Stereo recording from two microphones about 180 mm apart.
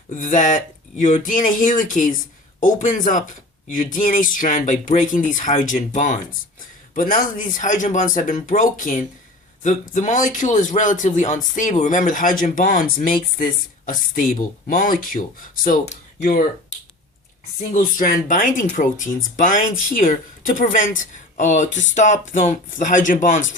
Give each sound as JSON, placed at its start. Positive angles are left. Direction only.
{"t": 0.2, "sound": "speech", "side_deg": 45}
{"t": 17.9, "sound": "speech", "side_deg": 50}